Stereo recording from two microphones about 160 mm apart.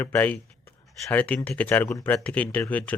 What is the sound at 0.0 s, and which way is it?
Speech, 10° left (ahead or behind).